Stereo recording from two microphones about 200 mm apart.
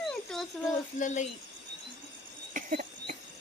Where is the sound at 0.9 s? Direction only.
40° left (ahead or behind).